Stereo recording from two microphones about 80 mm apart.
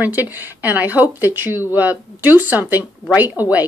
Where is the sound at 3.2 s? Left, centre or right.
Left.